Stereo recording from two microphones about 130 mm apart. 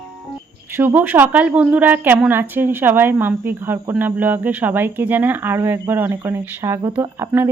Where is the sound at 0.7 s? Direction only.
15° right (ahead or behind).